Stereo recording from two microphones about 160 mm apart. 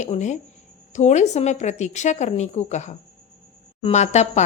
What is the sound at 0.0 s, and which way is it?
A woman's voice, 45° left (ahead or behind).